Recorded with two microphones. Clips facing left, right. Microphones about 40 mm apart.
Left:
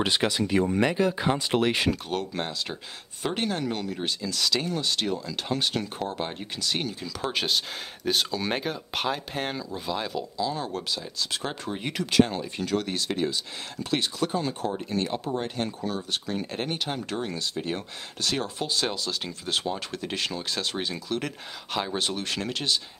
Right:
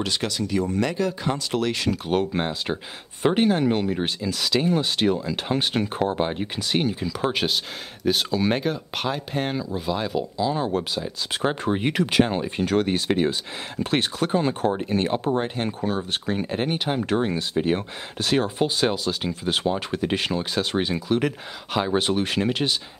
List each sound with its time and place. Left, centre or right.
0.0 s speech: left
2.0 s speech: right
4.3 s speech: centre
7.4 s speech: centre; by 16.4 s right
16.4 s speech: centre